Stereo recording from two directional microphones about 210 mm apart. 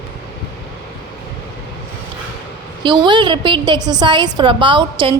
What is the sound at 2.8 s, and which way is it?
A woman's voice, 20° right (ahead or behind).